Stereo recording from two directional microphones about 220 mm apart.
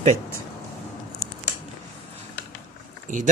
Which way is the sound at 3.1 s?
35° right (ahead or behind).